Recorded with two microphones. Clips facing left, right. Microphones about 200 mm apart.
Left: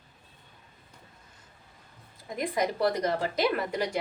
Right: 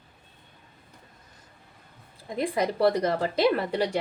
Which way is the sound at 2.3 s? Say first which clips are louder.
Right 3 dB; 30° right (ahead or behind).